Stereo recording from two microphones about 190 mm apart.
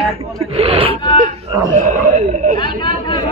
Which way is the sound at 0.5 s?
30° right (ahead or behind).